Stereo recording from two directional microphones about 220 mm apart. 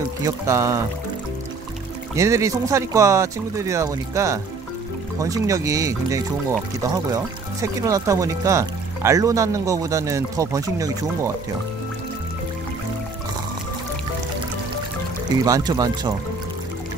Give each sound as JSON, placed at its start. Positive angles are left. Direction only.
{"t": 0.2, "sound": "speech", "side_deg": -15}
{"t": 2.1, "sound": "speech", "side_deg": -15}
{"t": 15.4, "sound": "speech", "side_deg": -15}